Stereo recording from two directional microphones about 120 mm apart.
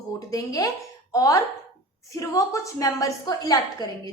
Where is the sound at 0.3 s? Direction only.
30° left (ahead or behind).